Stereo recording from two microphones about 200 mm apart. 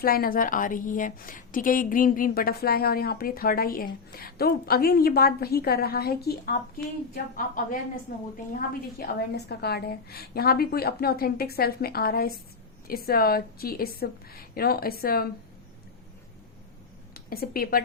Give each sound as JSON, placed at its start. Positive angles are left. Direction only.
{"t": 0.0, "sound": "a woman's voice", "side_deg": 45}
{"t": 17.2, "sound": "speech", "side_deg": 50}